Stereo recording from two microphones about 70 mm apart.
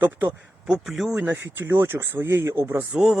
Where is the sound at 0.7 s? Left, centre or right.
Centre.